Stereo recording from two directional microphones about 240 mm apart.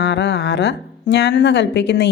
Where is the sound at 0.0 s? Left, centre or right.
Left.